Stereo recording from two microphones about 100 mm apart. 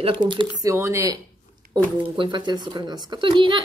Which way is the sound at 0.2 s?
10° right (ahead or behind).